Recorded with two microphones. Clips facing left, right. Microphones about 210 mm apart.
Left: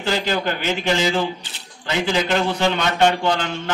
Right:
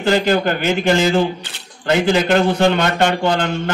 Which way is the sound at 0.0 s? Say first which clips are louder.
Right 6 dB; 55° right (ahead or behind).